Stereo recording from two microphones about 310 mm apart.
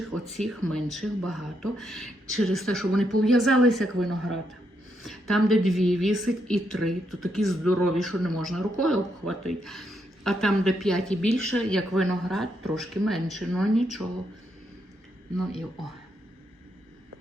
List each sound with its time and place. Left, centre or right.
0.1 s speech: centre
11.3 s a woman's voice: left
11.5 s speech: centre
15.4 s speech: centre